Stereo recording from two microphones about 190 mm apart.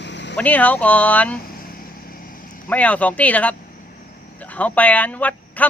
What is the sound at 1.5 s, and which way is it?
Vehicle, 50° left (ahead or behind).